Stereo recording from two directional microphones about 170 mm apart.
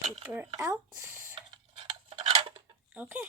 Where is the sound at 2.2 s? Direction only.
25° right (ahead or behind).